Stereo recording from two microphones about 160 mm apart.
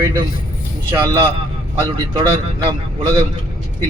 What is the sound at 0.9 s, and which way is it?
Speech, 25° right (ahead or behind).